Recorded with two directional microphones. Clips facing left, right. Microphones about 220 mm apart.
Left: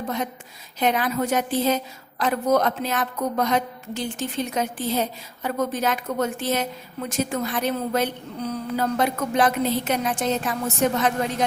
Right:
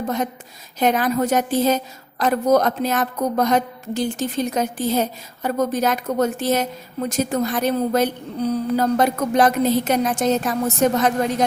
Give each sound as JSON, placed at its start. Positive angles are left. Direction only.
{"t": 0.8, "sound": "a woman's voice", "side_deg": -45}